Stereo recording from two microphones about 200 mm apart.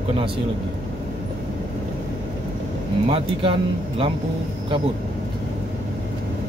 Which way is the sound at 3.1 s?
25° right (ahead or behind).